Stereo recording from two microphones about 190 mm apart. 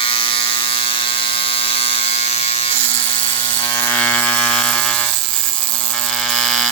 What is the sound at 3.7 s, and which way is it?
Electric toothbrush, 10° left (ahead or behind).